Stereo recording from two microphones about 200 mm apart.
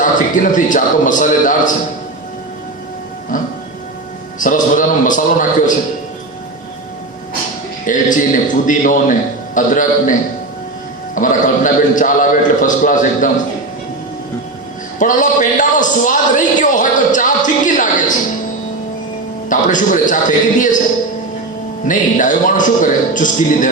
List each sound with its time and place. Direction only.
0.0 s a man's voice: 40° left (ahead or behind)
4.4 s a man's voice: 40° left (ahead or behind)
7.9 s a man's voice: 40° left (ahead or behind)
14.9 s a man's voice: 40° left (ahead or behind)
19.5 s a man's voice: 40° left (ahead or behind)
21.8 s a man's voice: 40° left (ahead or behind)